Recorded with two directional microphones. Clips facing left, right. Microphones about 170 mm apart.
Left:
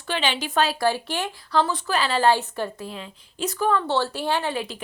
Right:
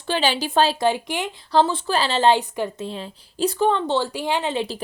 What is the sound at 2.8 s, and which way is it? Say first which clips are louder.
A woman's voice: right 4 dB; 30° right (ahead or behind).